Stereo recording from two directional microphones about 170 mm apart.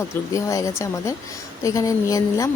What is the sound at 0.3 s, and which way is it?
A woman's voice, 20° left (ahead or behind).